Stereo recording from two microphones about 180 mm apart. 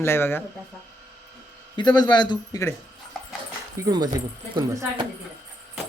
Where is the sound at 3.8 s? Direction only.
20° right (ahead or behind).